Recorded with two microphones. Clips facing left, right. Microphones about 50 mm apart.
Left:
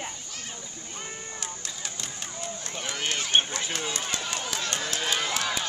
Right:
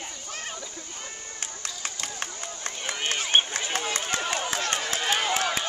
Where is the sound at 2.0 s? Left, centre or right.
Right.